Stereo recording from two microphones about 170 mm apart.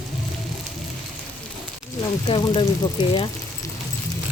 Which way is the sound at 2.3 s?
30° left (ahead or behind).